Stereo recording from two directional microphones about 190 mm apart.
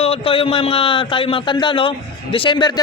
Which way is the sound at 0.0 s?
30° left (ahead or behind).